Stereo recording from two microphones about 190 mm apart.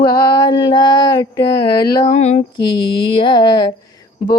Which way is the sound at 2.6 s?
25° left (ahead or behind).